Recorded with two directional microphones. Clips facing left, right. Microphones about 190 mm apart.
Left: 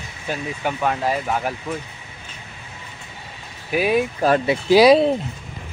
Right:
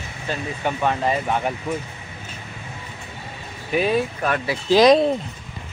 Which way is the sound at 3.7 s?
10° left (ahead or behind).